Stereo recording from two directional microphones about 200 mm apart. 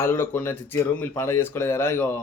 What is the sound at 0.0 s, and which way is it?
Speech, 10° left (ahead or behind).